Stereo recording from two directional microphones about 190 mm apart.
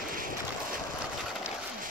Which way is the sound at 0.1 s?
45° right (ahead or behind).